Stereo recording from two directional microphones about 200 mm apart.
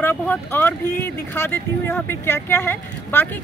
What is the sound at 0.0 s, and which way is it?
Speech, 10° left (ahead or behind).